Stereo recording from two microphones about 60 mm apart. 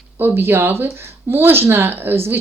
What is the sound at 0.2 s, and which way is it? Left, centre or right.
Speech, right.